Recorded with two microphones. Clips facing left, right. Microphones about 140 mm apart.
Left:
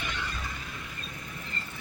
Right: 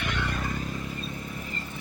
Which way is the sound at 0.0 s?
65° right (ahead or behind).